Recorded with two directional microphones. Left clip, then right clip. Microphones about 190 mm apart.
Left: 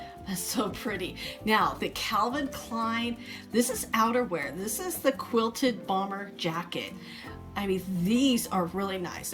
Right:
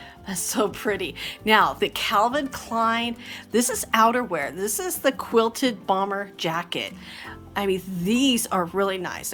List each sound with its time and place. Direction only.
0.3 s speech: 20° right (ahead or behind)